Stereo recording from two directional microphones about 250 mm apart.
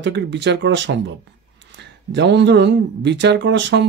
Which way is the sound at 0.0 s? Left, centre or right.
Right.